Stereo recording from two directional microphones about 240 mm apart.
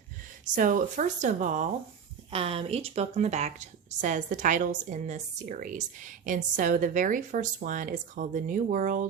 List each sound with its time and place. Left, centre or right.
0.4 s speech: right